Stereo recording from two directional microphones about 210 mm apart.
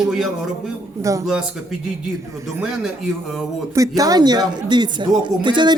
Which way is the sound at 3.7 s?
15° right (ahead or behind).